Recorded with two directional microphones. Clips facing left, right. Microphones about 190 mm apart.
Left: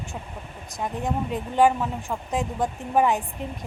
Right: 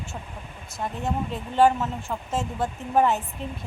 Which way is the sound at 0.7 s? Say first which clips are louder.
Left 1 dB; 15° left (ahead or behind).